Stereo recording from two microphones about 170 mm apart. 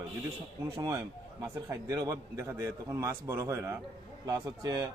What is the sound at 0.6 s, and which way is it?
A man's voice, 20° right (ahead or behind).